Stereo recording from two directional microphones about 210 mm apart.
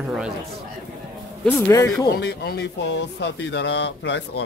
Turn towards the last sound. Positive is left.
turn(degrees=55)  # may be behind; listen again after turning